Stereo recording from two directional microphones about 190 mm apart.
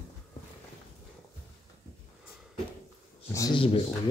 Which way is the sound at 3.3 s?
20° left (ahead or behind).